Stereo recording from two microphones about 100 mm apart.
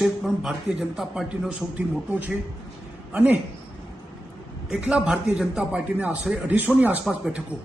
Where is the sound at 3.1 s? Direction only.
15° right (ahead or behind).